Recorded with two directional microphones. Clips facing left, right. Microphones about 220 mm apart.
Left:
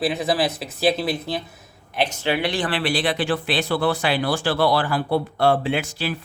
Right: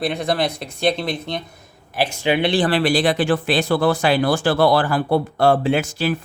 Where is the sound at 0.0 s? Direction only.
5° left (ahead or behind).